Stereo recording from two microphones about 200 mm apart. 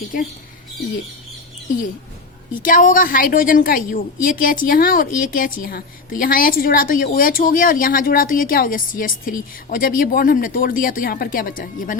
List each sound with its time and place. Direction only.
0.1 s a woman's voice: 45° left (ahead or behind)
2.5 s a woman's voice: 40° left (ahead or behind)